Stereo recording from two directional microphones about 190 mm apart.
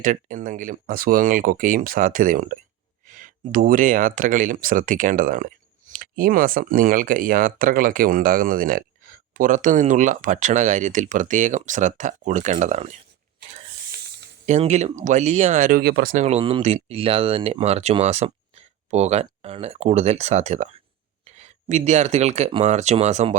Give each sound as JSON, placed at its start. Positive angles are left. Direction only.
{"t": 0.0, "sound": "speech", "side_deg": -45}
{"t": 14.4, "sound": "speech", "side_deg": -35}
{"t": 16.2, "sound": "speech", "side_deg": -30}